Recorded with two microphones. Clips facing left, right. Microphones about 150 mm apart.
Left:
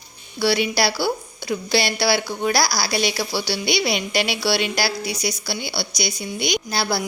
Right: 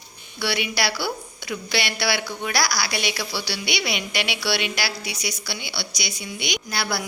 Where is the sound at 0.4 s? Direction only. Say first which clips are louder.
Left 6 dB; 35° left (ahead or behind).